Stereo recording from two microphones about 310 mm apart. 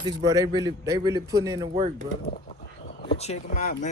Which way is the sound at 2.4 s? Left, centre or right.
Left.